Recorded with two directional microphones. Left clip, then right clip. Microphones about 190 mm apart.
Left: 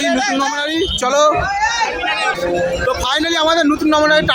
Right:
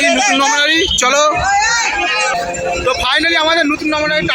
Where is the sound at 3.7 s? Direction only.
30° left (ahead or behind).